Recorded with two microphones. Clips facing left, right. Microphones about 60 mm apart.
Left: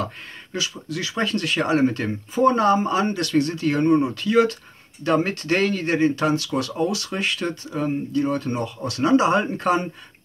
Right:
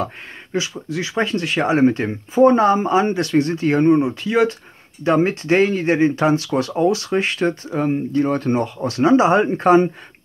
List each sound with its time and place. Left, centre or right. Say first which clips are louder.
0.0 s speech: right 3 dB; right